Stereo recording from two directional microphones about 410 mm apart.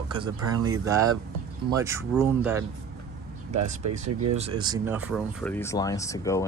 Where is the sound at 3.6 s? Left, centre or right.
Right.